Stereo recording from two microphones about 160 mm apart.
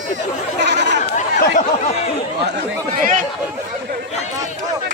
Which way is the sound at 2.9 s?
55° right (ahead or behind).